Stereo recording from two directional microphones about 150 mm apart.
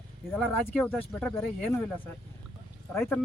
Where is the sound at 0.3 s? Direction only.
10° left (ahead or behind).